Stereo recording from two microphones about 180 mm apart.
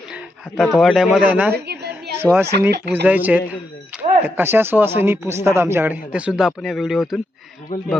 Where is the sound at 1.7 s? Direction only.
65° right (ahead or behind).